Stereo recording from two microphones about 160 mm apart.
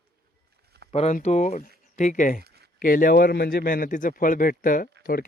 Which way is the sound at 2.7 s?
60° left (ahead or behind).